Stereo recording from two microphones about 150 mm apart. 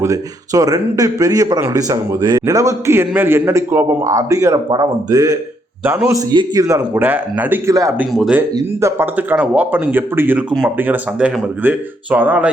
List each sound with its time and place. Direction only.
0.0 s speech: 20° right (ahead or behind)
8.1 s speech: centre (ahead or behind)
8.4 s speech: 15° right (ahead or behind)